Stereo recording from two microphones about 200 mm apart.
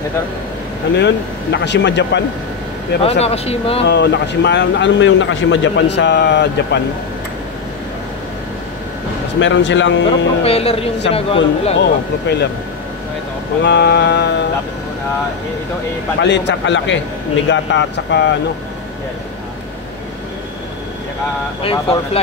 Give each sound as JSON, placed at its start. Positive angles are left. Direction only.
{"t": 0.9, "sound": "speech", "side_deg": 60}
{"t": 3.0, "sound": "speech", "side_deg": 30}
{"t": 3.8, "sound": "speech", "side_deg": 60}
{"t": 9.4, "sound": "speech", "side_deg": 65}
{"t": 10.0, "sound": "speech", "side_deg": 30}
{"t": 11.8, "sound": "speech", "side_deg": 55}
{"t": 13.7, "sound": "speech", "side_deg": 60}
{"t": 16.2, "sound": "speech", "side_deg": 60}
{"t": 21.6, "sound": "speech", "side_deg": 30}